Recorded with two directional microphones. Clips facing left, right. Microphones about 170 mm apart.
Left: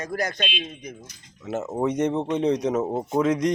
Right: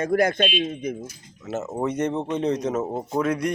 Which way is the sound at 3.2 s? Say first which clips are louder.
Left 2 dB; 20° left (ahead or behind).